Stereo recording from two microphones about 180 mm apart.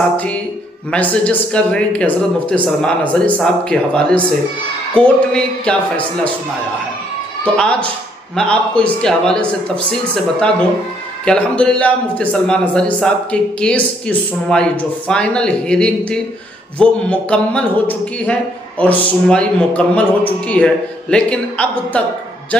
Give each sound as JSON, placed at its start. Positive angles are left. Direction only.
{"t": 0.9, "sound": "a man's voice", "side_deg": 5}
{"t": 7.5, "sound": "a man's voice", "side_deg": 5}
{"t": 11.2, "sound": "a man's voice", "side_deg": 5}